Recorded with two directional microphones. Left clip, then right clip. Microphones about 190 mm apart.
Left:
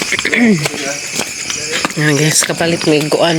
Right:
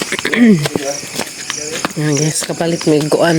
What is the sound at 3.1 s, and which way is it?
Speech, 25° right (ahead or behind).